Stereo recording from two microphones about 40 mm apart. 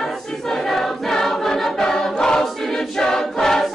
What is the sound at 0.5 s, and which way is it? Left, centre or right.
Choir, centre.